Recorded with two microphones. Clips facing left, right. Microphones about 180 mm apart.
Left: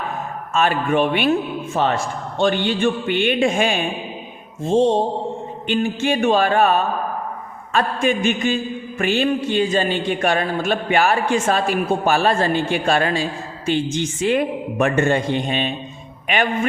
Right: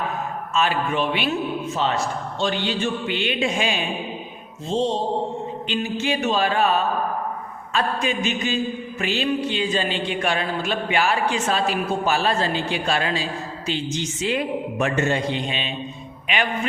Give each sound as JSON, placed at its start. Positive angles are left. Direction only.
{"t": 0.5, "sound": "a man's voice", "side_deg": 50}